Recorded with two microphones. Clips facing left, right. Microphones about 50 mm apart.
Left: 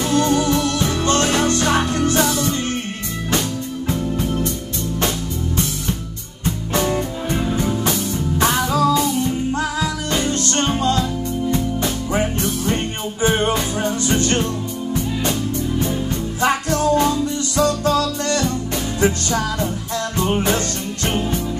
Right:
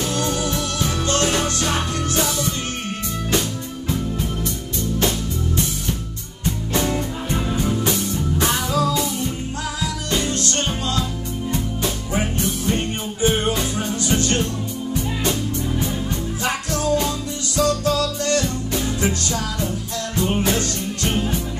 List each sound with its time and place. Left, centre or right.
0.1 s music: left
7.5 s music: left
16.3 s music: left